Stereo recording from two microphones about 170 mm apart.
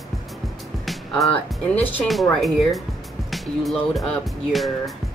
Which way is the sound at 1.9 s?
Centre (ahead or behind).